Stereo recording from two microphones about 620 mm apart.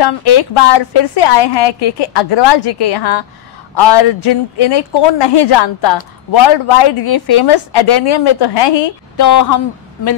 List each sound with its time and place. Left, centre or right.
0.0 s speech: left
9.1 s speech: left